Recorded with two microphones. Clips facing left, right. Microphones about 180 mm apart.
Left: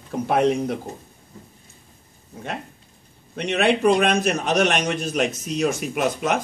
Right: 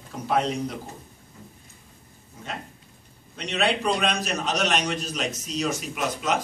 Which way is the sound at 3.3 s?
55° left (ahead or behind).